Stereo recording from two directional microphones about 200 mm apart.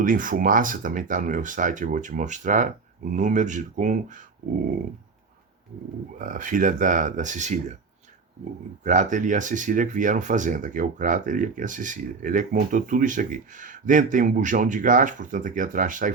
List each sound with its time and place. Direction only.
0.0 s speech: 40° right (ahead or behind)
6.1 s speech: 40° right (ahead or behind)
8.8 s speech: 40° right (ahead or behind)